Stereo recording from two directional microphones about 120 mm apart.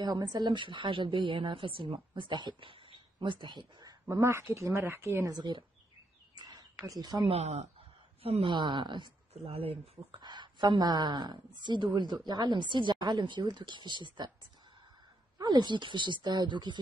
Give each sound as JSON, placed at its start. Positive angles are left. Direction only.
{"t": 0.0, "sound": "a woman's voice", "side_deg": -35}
{"t": 4.1, "sound": "speech", "side_deg": -20}
{"t": 5.3, "sound": "a woman's voice", "side_deg": -40}
{"t": 6.3, "sound": "a sound", "side_deg": -35}
{"t": 6.9, "sound": "a woman's voice", "side_deg": -35}
{"t": 7.2, "sound": "speech", "side_deg": -65}
{"t": 8.2, "sound": "a woman's voice", "side_deg": -50}
{"t": 9.3, "sound": "a woman's voice", "side_deg": -55}
{"t": 10.2, "sound": "a woman's voice", "side_deg": -35}
{"t": 15.3, "sound": "a woman's voice", "side_deg": -35}